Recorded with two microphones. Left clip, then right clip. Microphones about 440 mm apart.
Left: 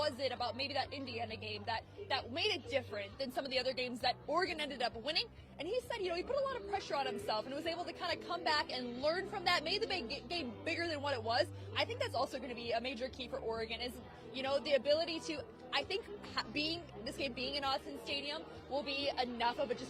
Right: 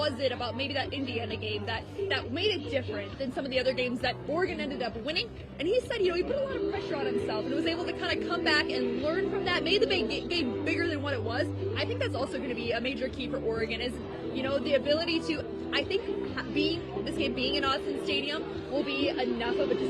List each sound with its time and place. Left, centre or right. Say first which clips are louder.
0.0 s a woman's voice: right 7 dB; left
2.0 s a woman's voice: right 7 dB; left
17.2 s a woman's voice: right 9 dB; left
18.9 s a woman's voice: right 7 dB; left